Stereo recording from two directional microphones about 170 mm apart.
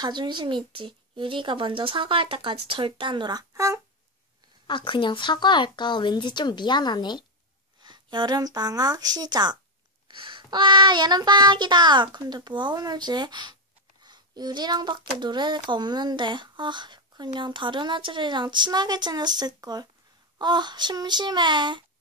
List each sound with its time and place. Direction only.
0.0 s speech: 25° right (ahead or behind)
4.6 s speech: 30° left (ahead or behind)
7.8 s speech: 25° right (ahead or behind)